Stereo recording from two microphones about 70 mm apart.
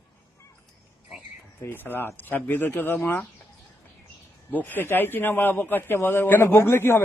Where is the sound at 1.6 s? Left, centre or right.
Left.